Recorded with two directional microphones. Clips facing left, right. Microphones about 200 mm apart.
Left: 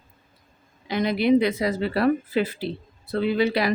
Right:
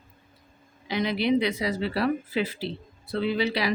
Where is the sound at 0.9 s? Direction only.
50° left (ahead or behind).